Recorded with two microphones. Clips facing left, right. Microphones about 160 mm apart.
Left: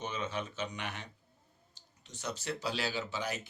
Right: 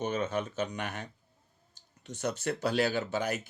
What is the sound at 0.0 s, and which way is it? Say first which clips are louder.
Speech: right 6 dB; 50° right (ahead or behind).